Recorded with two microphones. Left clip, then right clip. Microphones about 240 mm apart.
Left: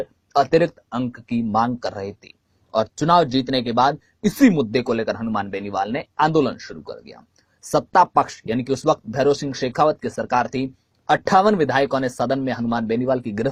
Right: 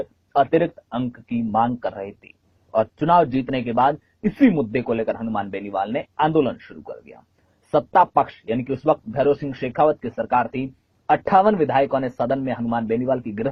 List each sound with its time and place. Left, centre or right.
0.0 s speech: left